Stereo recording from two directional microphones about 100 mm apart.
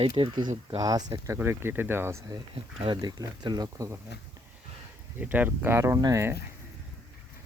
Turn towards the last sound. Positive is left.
turn(degrees=-30)  # may be behind; listen again after turning